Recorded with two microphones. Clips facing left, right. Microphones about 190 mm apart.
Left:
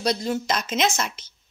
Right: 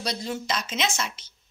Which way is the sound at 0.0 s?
45° left (ahead or behind).